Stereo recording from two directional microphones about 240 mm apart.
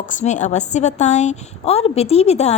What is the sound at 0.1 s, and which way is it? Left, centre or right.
A woman's voice, left.